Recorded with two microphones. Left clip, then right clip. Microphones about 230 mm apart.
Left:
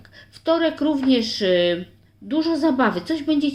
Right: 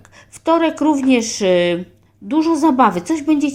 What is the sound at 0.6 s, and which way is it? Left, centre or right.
A woman's voice, right.